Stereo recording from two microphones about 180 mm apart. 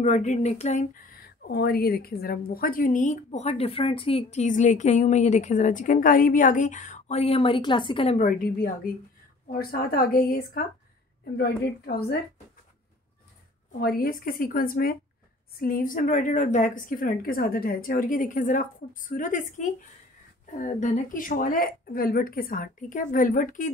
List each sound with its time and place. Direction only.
0.0 s speech: 45° left (ahead or behind)
8.2 s a woman's voice: 50° left (ahead or behind)
13.7 s speech: 55° left (ahead or behind)